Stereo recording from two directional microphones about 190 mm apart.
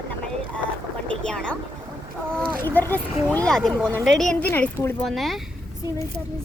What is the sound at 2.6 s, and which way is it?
Speech, 10° left (ahead or behind).